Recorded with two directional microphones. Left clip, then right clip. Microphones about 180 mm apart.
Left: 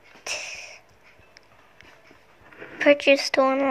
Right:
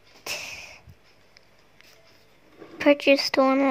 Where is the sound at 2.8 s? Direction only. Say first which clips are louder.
Left 1 dB; 45° right (ahead or behind).